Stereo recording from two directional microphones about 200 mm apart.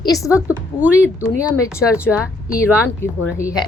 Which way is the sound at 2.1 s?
5° left (ahead or behind).